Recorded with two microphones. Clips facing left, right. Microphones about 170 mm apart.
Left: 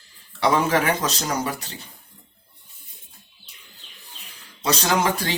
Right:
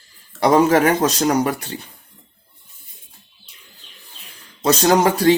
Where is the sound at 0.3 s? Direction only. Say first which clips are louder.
Right 6 dB; 45° right (ahead or behind).